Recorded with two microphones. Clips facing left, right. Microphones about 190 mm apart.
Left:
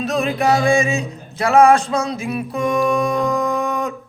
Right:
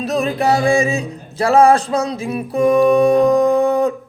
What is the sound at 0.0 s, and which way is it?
Singing, 35° right (ahead or behind).